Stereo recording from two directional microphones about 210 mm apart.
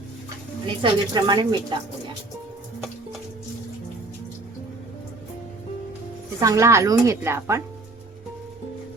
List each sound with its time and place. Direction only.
0.8 s speech: 20° right (ahead or behind)
6.4 s a woman's voice: 15° right (ahead or behind)